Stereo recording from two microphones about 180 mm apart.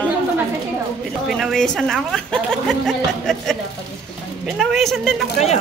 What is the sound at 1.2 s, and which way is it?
A woman's voice, centre (ahead or behind).